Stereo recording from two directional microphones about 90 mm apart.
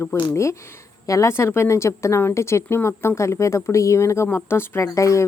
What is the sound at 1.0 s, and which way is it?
A woman's voice, 35° left (ahead or behind).